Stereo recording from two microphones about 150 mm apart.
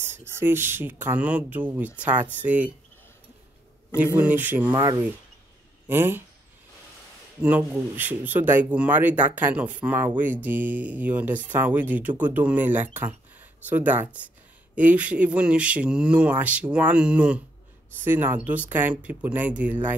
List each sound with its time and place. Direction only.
0.0 s speech: 15° right (ahead or behind)
4.0 s speech: 10° right (ahead or behind)
4.6 s speech: 25° right (ahead or behind)
5.9 s speech: 15° right (ahead or behind)
7.4 s speech: 10° right (ahead or behind)